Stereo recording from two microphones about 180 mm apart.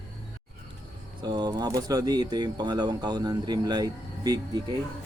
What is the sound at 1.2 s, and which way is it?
Speech, 25° right (ahead or behind).